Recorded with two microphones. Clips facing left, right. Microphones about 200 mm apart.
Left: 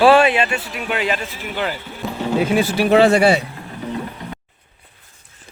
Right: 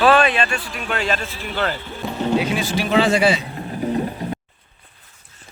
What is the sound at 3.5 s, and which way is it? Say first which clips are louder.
Music: right 5 dB; 35° right (ahead or behind).